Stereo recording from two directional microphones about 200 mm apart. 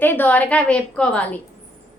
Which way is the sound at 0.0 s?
10° left (ahead or behind).